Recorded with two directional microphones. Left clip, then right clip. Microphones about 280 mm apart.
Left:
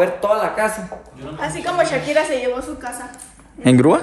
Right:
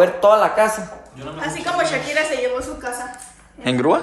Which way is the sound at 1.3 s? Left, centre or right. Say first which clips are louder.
Left 2 dB; left.